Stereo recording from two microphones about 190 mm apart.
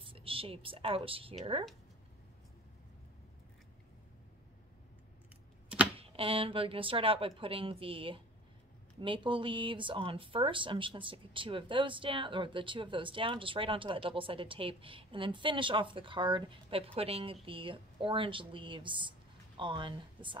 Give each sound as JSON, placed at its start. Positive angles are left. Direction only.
{"t": 0.0, "sound": "a woman's voice", "side_deg": -30}
{"t": 5.9, "sound": "speech", "side_deg": -30}